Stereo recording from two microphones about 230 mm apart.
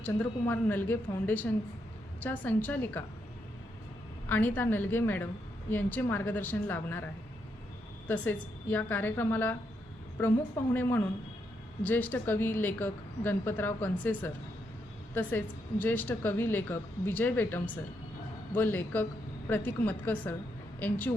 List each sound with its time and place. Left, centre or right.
0.0 s a woman's voice: centre
4.3 s a woman's voice: centre
8.0 s a woman's voice: centre
10.8 s a woman's voice: centre